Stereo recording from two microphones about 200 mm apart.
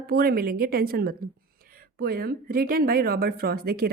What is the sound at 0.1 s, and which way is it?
Speech, 50° right (ahead or behind).